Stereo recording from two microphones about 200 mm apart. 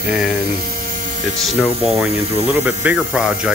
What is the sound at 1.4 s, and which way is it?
Speech, centre (ahead or behind).